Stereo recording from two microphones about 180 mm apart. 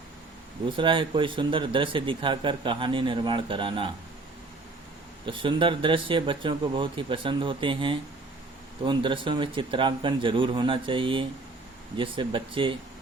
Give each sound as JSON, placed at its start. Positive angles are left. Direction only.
{"t": 0.8, "sound": "a man's voice", "side_deg": -25}
{"t": 5.2, "sound": "a man's voice", "side_deg": -30}